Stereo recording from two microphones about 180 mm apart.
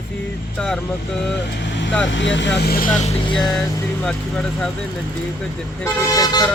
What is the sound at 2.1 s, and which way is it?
Speech, 90° left.